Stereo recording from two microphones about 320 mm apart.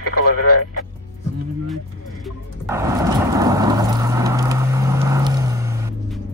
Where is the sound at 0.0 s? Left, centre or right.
Left.